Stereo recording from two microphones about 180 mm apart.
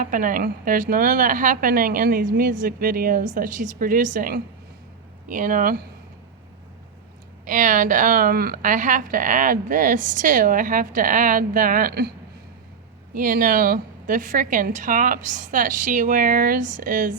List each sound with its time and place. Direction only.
0.0 s speech: 50° right (ahead or behind)
7.4 s speech: 45° right (ahead or behind)
13.1 s speech: 50° right (ahead or behind)